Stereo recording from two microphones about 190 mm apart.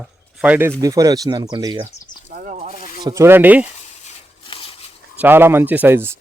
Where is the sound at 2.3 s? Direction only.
45° right (ahead or behind).